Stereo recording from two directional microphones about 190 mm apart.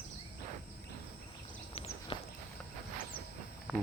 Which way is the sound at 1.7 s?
30° left (ahead or behind).